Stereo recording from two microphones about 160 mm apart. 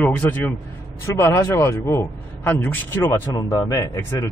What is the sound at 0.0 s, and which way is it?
A man's voice, 10° left (ahead or behind).